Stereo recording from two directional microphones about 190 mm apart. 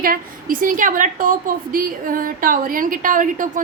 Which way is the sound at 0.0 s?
50° right (ahead or behind).